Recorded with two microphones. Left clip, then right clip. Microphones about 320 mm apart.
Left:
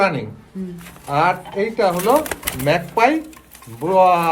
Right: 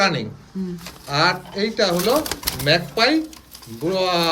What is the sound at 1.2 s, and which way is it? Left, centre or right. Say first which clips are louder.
Speech: left 2 dB; centre.